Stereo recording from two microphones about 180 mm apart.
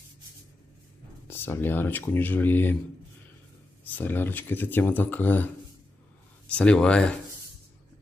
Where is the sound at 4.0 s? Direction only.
10° left (ahead or behind).